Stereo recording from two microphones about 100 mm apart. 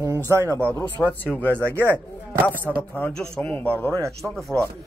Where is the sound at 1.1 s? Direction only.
15° left (ahead or behind).